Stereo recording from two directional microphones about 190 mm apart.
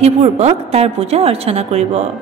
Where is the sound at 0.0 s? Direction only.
35° right (ahead or behind).